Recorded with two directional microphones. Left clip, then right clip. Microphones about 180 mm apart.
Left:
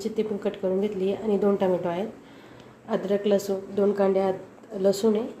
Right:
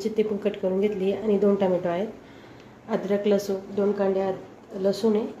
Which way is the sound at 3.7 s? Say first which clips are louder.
Left 2 dB; 25° left (ahead or behind).